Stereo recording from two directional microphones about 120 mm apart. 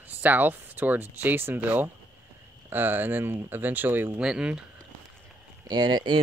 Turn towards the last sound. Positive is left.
turn(degrees=-40)  # may be behind; listen again after turning